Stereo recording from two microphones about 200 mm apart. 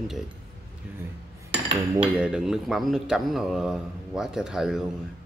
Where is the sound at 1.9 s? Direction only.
5° right (ahead or behind).